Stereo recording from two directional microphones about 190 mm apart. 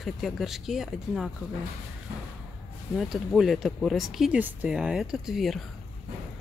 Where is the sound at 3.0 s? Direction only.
Centre (ahead or behind).